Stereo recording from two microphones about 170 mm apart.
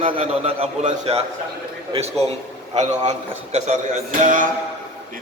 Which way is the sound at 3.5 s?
45° right (ahead or behind).